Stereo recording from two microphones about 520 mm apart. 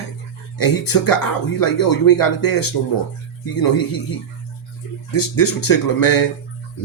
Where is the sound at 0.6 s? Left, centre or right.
Left.